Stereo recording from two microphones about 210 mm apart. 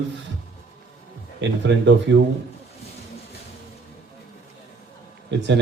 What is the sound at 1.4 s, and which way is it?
Speech, 60° right (ahead or behind).